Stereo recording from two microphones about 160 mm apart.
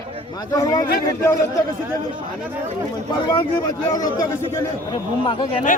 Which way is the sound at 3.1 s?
35° left (ahead or behind).